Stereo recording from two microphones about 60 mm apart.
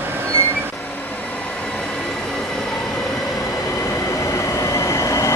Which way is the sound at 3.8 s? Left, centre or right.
Left.